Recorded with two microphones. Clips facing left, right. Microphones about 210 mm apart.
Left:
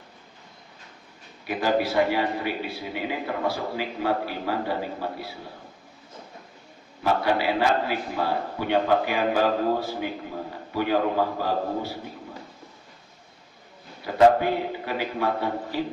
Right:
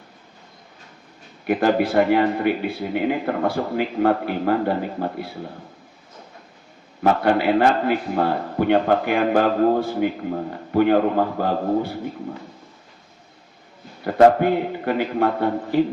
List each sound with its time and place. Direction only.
1.5 s a man's voice: 50° right (ahead or behind)
7.0 s a man's voice: 55° right (ahead or behind)
14.0 s a man's voice: 55° right (ahead or behind)